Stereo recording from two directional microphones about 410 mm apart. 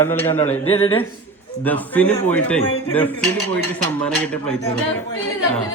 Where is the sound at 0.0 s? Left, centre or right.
Centre.